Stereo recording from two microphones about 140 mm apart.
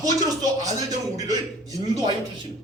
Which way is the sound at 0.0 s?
25° right (ahead or behind).